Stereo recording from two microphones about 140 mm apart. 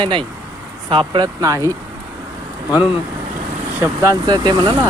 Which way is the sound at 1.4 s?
25° right (ahead or behind).